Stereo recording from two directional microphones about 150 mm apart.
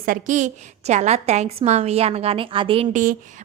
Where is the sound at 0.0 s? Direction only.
60° right (ahead or behind); by 2.8 s 35° right (ahead or behind).